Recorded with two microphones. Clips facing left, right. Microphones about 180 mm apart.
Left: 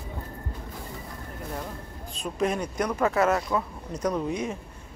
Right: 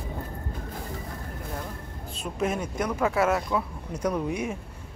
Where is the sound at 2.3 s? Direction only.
5° right (ahead or behind).